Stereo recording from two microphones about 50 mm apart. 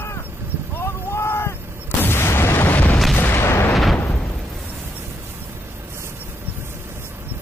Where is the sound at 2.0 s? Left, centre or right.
Left.